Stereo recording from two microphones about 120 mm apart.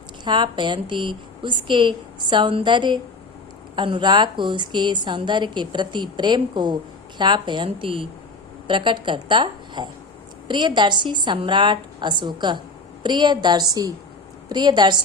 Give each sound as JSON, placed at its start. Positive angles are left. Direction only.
{"t": 0.3, "sound": "a woman's voice", "side_deg": -40}